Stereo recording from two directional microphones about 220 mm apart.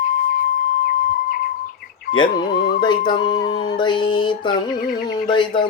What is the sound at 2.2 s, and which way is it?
Music, 20° left (ahead or behind).